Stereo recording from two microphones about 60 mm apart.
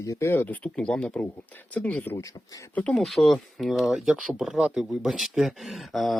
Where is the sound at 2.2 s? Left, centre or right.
Left.